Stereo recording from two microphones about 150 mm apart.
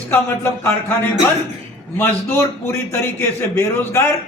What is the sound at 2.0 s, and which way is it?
A man's voice, 15° left (ahead or behind).